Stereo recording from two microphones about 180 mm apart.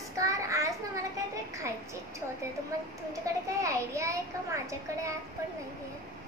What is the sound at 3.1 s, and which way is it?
A child's voice, 15° right (ahead or behind).